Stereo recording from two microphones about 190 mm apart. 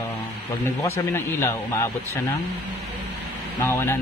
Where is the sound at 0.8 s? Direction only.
15° left (ahead or behind).